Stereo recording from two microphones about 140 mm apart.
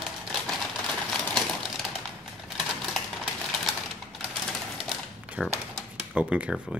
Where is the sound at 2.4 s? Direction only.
Centre (ahead or behind).